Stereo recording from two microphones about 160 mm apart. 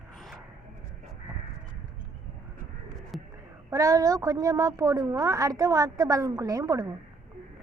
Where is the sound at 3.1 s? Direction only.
Centre (ahead or behind).